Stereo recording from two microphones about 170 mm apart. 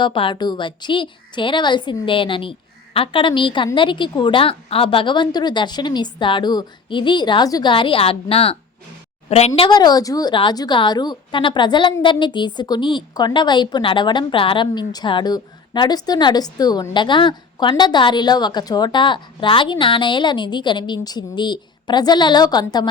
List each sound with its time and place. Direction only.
0.0 s a woman's voice: 30° left (ahead or behind)